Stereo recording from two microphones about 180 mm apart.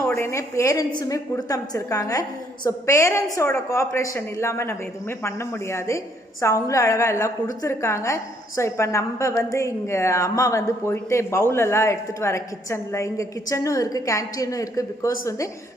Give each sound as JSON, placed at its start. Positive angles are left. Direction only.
{"t": 0.0, "sound": "a woman's voice", "side_deg": 15}